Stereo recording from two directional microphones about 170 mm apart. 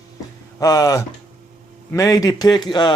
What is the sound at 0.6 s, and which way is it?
A man's voice, 20° left (ahead or behind).